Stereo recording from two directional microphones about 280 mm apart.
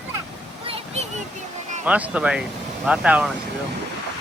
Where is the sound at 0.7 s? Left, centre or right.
Right.